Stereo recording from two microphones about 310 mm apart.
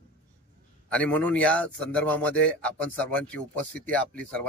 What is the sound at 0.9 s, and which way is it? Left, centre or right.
Speech, centre.